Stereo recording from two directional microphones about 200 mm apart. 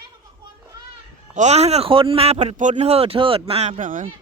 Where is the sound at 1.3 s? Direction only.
35° right (ahead or behind).